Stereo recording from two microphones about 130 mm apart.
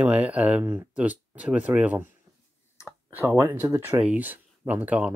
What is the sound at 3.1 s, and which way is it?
Speech, 15° right (ahead or behind).